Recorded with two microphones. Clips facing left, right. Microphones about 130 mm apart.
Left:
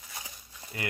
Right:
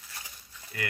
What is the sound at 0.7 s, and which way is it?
Speech, 25° left (ahead or behind).